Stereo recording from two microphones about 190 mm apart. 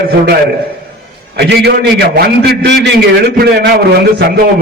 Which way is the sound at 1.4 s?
60° right (ahead or behind).